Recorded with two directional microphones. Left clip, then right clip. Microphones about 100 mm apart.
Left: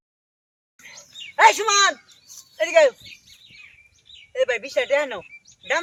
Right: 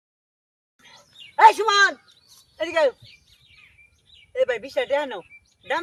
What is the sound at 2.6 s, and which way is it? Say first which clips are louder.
Speech: left 5 dB; centre (ahead or behind).